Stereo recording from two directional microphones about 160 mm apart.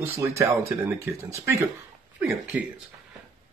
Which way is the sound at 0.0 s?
15° right (ahead or behind).